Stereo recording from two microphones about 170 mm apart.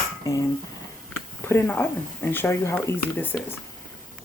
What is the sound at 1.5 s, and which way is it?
Speech, 15° left (ahead or behind).